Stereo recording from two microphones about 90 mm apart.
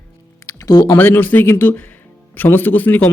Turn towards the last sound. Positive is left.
turn(degrees=20)  # may be behind; listen again after turning